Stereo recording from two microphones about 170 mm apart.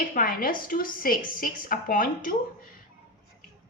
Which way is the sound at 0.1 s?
55° left (ahead or behind).